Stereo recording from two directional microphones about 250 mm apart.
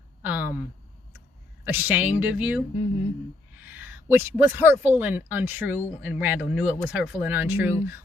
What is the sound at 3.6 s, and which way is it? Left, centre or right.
Speech, centre.